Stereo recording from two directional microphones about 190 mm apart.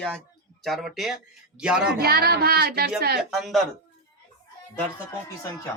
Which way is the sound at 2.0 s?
55° right (ahead or behind).